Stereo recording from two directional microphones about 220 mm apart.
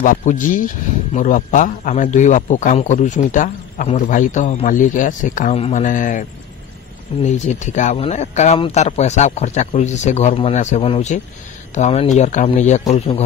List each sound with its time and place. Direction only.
0.0 s a man's voice: 35° left (ahead or behind)
7.2 s a man's voice: 30° left (ahead or behind)